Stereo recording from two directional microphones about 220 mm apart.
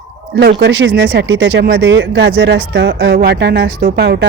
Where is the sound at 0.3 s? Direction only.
50° right (ahead or behind).